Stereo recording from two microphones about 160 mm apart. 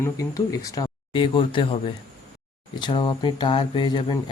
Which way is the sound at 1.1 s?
35° left (ahead or behind).